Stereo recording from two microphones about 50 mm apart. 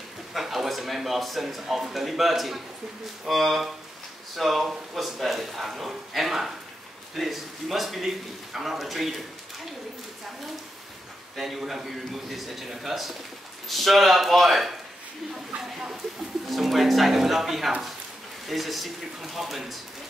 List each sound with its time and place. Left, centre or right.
0.3 s speech: centre
11.3 s speech: centre